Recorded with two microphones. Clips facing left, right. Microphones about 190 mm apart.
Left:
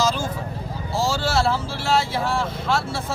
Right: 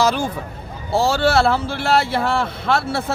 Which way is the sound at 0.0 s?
60° right (ahead or behind).